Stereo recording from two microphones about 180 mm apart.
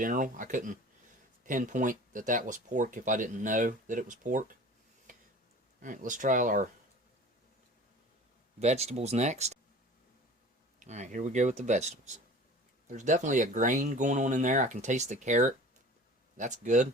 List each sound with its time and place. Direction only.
0.0 s speech: 50° right (ahead or behind)
5.1 s a sound: 45° right (ahead or behind)
5.8 s speech: 45° right (ahead or behind)
8.5 s speech: 35° right (ahead or behind)
10.8 s speech: 40° right (ahead or behind)